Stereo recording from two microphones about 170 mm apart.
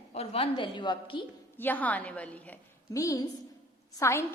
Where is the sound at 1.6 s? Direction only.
10° left (ahead or behind).